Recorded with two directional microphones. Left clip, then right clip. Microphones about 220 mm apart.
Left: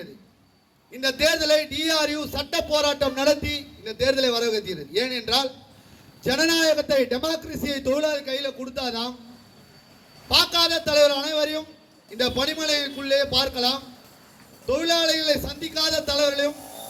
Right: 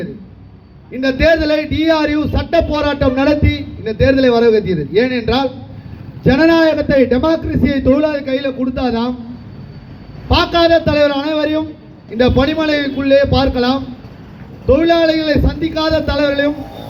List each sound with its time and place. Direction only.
0.9 s a man's voice: 60° left (ahead or behind)
10.2 s a man's voice: 60° left (ahead or behind)